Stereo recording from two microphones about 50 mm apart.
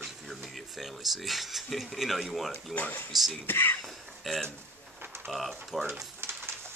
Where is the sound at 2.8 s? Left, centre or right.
Left.